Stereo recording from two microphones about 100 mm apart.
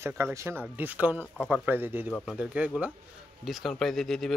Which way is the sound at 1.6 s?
20° right (ahead or behind).